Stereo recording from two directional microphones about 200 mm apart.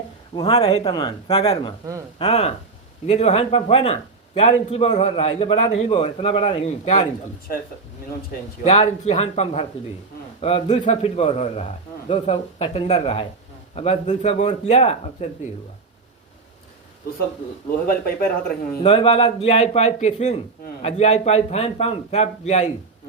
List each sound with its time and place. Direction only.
0.3 s a man's voice: 20° left (ahead or behind)
8.6 s a man's voice: 35° left (ahead or behind)
17.8 s speech: 50° left (ahead or behind)
18.8 s a man's voice: 30° left (ahead or behind)